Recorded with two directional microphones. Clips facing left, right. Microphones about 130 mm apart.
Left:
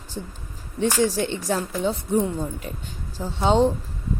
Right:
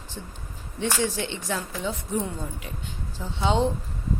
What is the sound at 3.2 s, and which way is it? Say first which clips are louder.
Speech: left 5 dB; 40° left (ahead or behind).